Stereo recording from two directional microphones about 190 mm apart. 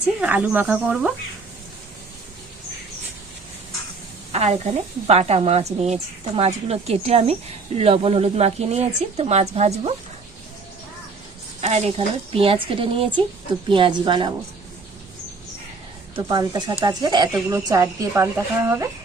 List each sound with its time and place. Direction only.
0.2 s a woman's voice: 5° right (ahead or behind)
4.3 s speech: 35° right (ahead or behind)
11.6 s a woman's voice: 35° right (ahead or behind)
16.1 s a woman's voice: 25° right (ahead or behind)